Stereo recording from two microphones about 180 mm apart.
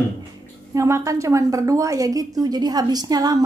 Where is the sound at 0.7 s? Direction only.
15° right (ahead or behind).